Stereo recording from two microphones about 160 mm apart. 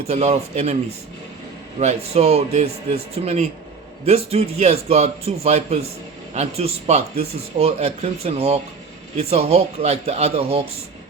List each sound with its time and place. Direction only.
0.0 s speech: 40° right (ahead or behind)
1.8 s speech: 40° right (ahead or behind)